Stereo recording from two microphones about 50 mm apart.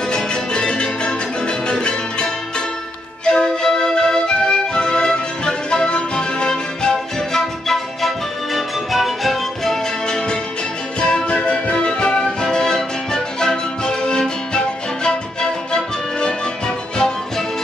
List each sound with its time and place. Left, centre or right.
0.1 s music: centre
3.3 s music: centre
10.0 s music: centre
15.7 s music: centre